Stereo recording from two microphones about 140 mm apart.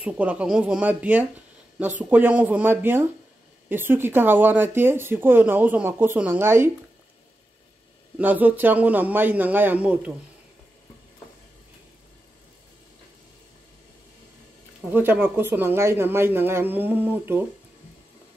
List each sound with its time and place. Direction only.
0.0 s speech: 10° right (ahead or behind)
8.2 s speech: 10° right (ahead or behind)
14.9 s speech: 15° right (ahead or behind)